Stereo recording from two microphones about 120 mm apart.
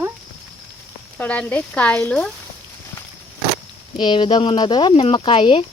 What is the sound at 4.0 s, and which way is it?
Speech, 45° left (ahead or behind).